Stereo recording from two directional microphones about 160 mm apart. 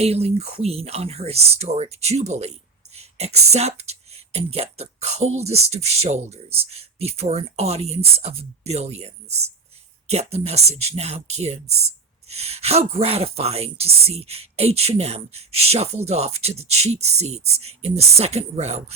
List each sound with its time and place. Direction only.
0.0 s speech: 40° right (ahead or behind)